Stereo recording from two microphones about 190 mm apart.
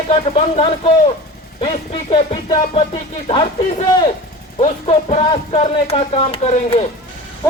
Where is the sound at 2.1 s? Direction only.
25° left (ahead or behind).